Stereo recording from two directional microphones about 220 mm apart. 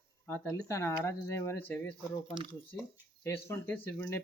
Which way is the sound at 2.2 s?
25° right (ahead or behind).